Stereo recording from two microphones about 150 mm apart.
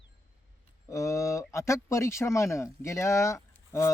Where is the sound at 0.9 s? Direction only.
20° left (ahead or behind).